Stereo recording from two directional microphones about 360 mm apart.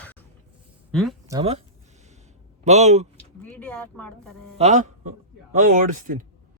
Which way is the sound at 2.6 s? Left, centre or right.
Centre.